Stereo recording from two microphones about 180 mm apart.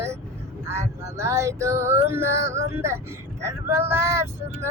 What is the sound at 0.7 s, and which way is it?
Music, 15° right (ahead or behind).